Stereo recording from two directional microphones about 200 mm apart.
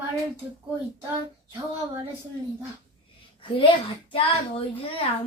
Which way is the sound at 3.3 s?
25° left (ahead or behind).